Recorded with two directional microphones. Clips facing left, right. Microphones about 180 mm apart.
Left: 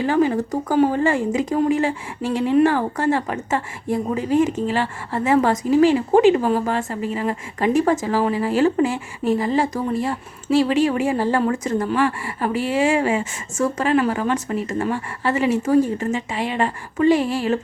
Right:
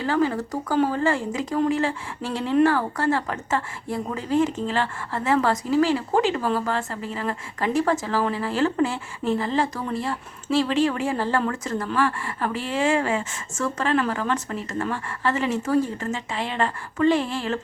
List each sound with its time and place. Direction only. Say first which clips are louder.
0.0 s speech: left 4 dB; 15° left (ahead or behind)